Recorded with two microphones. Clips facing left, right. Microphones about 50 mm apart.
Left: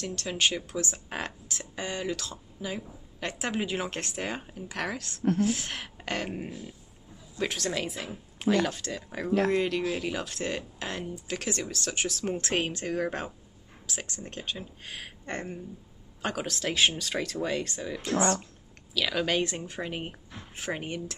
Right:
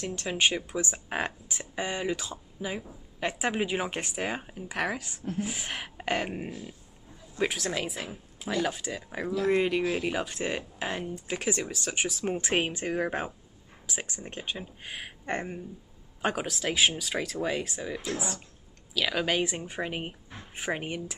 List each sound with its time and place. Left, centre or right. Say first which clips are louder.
0.0 s a woman's voice: right 1 dB; centre
8.4 s speech: left 5 dB; left
8.6 s a woman's voice: right 1 dB; centre
16.5 s a woman's voice: left 3 dB; centre